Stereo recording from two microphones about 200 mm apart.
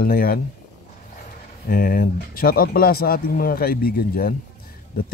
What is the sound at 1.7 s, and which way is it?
Speech, 45° left (ahead or behind).